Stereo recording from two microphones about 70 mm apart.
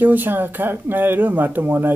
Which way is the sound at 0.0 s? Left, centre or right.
Right.